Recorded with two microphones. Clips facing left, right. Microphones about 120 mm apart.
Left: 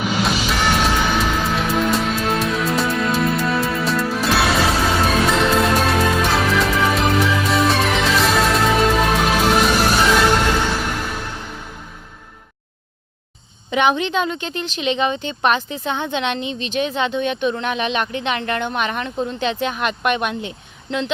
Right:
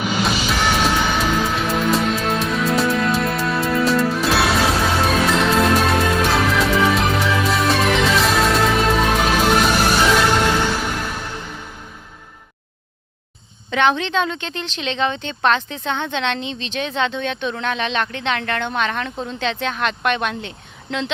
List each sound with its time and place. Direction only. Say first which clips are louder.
0.0 s music: even; centre (ahead or behind)
13.7 s speech: left 1 dB; 10° left (ahead or behind)